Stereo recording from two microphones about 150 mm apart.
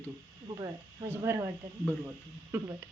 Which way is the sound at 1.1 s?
20° right (ahead or behind).